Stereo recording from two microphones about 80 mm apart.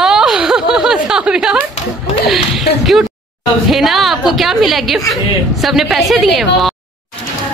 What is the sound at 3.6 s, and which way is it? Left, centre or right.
A woman's voice, centre.